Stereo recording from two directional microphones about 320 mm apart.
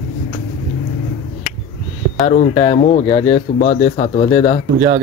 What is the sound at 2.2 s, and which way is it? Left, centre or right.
Speech, left.